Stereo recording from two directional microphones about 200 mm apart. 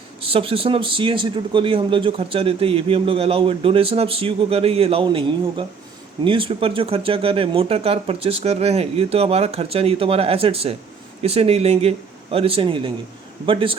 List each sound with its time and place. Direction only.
0.2 s a man's voice: 30° right (ahead or behind)